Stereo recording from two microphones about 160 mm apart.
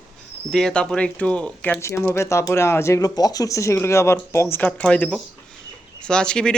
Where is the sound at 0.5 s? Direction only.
5° left (ahead or behind).